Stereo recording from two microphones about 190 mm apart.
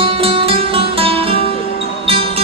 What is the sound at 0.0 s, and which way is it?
Music, 30° right (ahead or behind).